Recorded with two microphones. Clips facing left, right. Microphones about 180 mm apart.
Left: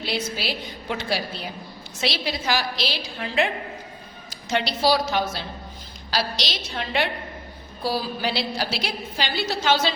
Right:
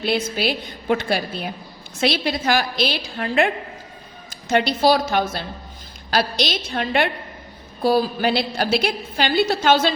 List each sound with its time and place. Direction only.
0.0 s a woman's voice: 55° right (ahead or behind)